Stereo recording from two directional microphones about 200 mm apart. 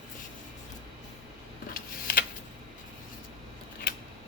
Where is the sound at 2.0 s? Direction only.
50° left (ahead or behind).